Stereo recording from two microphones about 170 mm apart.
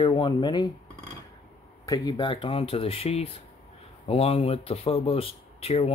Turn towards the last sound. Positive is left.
turn(degrees=35)  # may be behind; listen again after turning